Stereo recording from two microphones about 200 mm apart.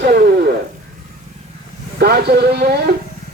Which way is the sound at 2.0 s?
55° right (ahead or behind).